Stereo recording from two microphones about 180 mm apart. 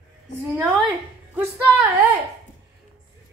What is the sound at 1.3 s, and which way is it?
Speech, 10° right (ahead or behind).